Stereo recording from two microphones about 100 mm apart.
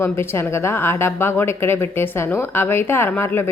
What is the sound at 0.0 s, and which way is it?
Speech, 25° left (ahead or behind).